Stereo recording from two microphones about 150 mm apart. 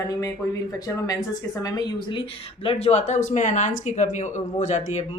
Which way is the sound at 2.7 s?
45° left (ahead or behind).